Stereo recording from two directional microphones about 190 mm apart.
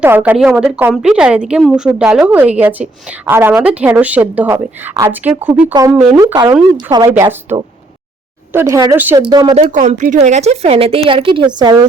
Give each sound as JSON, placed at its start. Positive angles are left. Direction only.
{"t": 0.0, "sound": "a woman's voice", "side_deg": -10}
{"t": 6.1, "sound": "a woman's voice", "side_deg": -20}
{"t": 8.5, "sound": "a woman's voice", "side_deg": -15}
{"t": 9.2, "sound": "speech", "side_deg": -25}
{"t": 9.6, "sound": "a woman's voice", "side_deg": -40}